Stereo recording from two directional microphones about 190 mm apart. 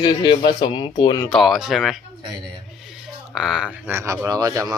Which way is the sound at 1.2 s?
Centre (ahead or behind).